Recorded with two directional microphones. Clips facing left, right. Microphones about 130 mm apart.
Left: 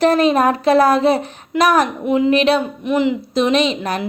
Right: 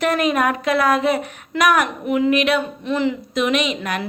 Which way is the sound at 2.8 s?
15° left (ahead or behind).